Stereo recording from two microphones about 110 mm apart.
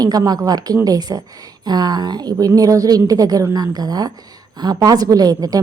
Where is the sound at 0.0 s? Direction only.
35° right (ahead or behind).